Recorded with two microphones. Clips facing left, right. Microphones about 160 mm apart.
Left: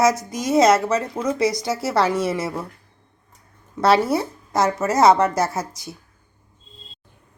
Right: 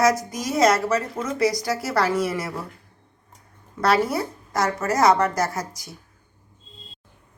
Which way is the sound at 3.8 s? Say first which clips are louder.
Left 3 dB; 25° left (ahead or behind).